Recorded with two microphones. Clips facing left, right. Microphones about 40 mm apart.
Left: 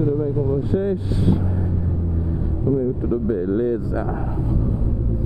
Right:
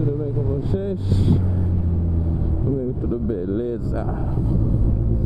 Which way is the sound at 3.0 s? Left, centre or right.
Centre.